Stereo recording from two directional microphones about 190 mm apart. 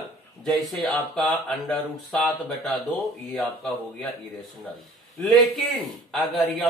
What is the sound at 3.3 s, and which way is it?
Speech, centre (ahead or behind).